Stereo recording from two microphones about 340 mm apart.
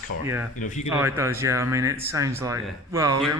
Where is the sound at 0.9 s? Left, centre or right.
Centre.